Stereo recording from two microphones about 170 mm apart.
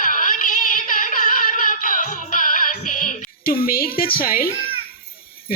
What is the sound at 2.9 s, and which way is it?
Speech, 50° left (ahead or behind).